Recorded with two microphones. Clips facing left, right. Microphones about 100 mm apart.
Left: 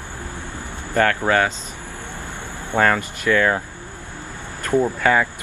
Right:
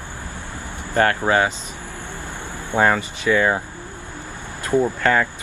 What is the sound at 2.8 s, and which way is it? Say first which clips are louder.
Speech: even; 15° right (ahead or behind).